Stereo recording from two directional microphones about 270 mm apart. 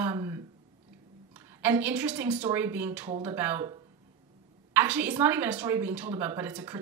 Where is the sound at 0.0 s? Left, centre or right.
Centre.